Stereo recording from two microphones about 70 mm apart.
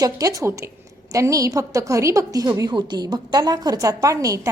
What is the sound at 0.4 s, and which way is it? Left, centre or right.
Speech, right.